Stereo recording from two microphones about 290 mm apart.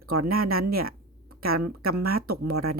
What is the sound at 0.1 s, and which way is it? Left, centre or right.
Speech, right.